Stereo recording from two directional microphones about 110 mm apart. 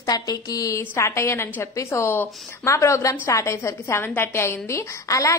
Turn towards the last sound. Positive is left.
turn(degrees=30)  # may be behind; listen again after turning